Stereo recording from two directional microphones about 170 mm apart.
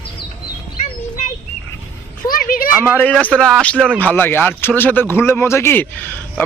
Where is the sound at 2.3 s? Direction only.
55° left (ahead or behind).